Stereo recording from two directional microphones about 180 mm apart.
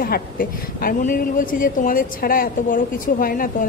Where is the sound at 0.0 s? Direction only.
55° left (ahead or behind).